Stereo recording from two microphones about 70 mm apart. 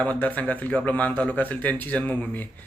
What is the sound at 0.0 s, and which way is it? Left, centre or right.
Speech, left.